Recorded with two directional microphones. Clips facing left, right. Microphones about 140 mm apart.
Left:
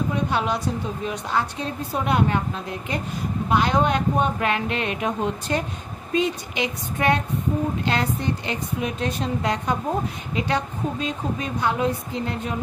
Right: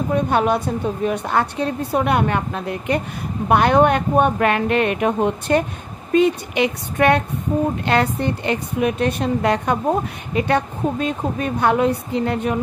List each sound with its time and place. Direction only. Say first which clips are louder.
0.1 s a woman's voice: right 6 dB; 50° right (ahead or behind)